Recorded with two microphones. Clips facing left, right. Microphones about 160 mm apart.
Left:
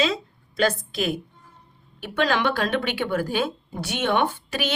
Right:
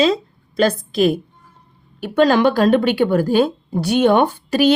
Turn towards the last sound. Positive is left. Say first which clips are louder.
# right 12 dB
turn(degrees=-40)  # may be behind; listen again after turning